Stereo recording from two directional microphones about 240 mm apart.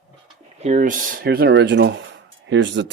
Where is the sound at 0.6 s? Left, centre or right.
Right.